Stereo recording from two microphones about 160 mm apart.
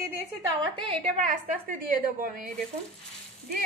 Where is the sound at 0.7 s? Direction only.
35° right (ahead or behind).